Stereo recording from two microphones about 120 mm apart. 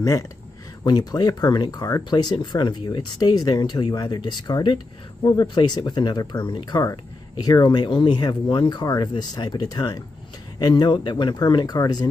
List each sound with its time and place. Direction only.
0.8 s speech: 35° left (ahead or behind)